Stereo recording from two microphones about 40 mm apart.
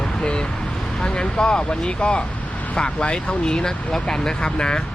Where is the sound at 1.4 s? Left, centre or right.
Left.